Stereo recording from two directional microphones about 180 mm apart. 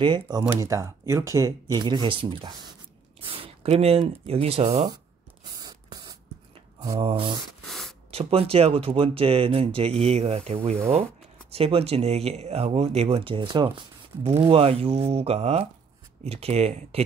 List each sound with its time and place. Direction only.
0.0 s speech: 25° right (ahead or behind)
5.6 s spray: 20° right (ahead or behind)
7.0 s speech: 30° right (ahead or behind)
7.6 s beatboxing: centre (ahead or behind)
8.1 s speech: 35° right (ahead or behind)